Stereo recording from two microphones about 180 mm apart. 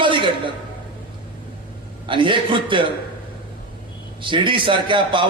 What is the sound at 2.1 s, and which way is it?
Speech, 25° right (ahead or behind).